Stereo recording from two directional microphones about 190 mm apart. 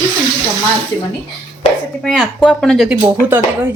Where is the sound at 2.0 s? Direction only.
5° left (ahead or behind).